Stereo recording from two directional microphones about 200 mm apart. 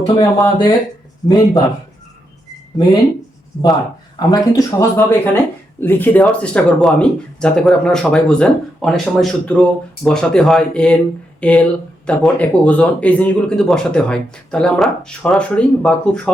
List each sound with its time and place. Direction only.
0.1 s speech: 20° left (ahead or behind)
4.2 s speech: 20° left (ahead or behind)